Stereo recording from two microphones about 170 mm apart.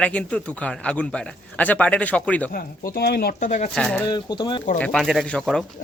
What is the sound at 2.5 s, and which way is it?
Speech, 60° left (ahead or behind).